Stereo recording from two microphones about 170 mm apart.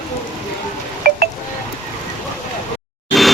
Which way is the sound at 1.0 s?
60° right (ahead or behind).